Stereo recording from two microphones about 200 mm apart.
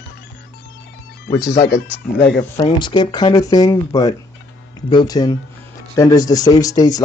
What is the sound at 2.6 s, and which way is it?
Speech, 25° left (ahead or behind).